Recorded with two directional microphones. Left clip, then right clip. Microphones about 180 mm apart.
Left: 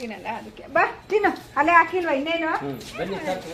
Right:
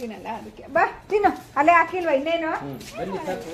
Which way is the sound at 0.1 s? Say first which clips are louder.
Left 1 dB; 35° right (ahead or behind).